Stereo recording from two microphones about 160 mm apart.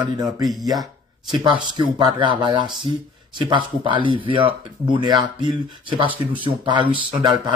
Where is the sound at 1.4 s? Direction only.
30° right (ahead or behind).